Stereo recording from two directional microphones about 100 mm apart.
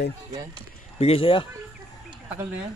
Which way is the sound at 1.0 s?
70° left (ahead or behind).